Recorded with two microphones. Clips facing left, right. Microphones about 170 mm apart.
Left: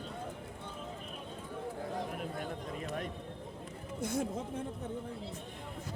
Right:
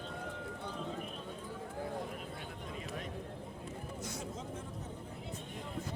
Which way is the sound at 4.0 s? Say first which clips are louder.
Left 12 dB; 55° left (ahead or behind).